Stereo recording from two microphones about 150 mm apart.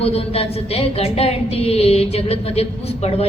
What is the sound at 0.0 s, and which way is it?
A woman's voice, 40° left (ahead or behind).